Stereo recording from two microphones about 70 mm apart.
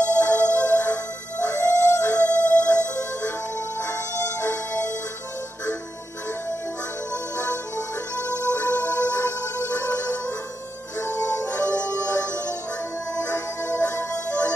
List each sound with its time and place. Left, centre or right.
0.2 s music: left
3.5 s music: left
8.2 s music: left